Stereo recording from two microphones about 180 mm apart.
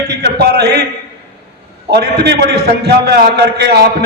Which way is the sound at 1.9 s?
65° right (ahead or behind).